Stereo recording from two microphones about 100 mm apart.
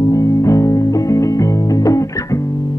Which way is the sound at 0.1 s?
30° left (ahead or behind).